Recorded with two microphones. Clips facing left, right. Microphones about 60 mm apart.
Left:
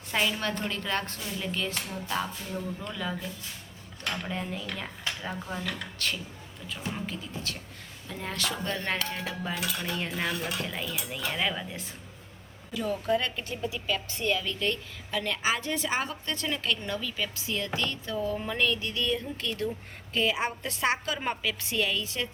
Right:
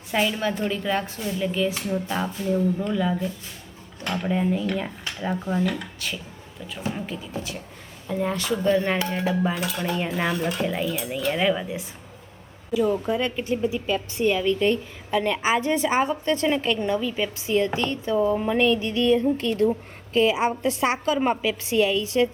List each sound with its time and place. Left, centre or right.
0.1 s speech: centre
5.6 s speech: centre
9.6 s dishes: centre
10.6 s speech: centre
13.1 s a woman's voice: centre